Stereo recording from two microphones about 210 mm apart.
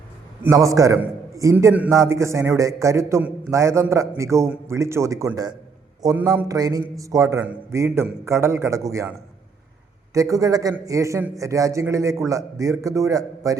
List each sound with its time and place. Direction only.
0.4 s a man's voice: 15° right (ahead or behind)
10.2 s a man's voice: 15° right (ahead or behind)